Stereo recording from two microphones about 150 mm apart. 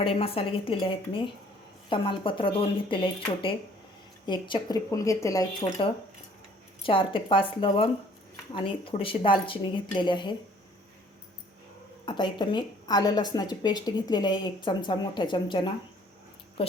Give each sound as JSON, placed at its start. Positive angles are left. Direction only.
{"t": 0.0, "sound": "a woman's voice", "side_deg": 40}
{"t": 6.8, "sound": "a woman's voice", "side_deg": 35}
{"t": 12.0, "sound": "a woman's voice", "side_deg": 30}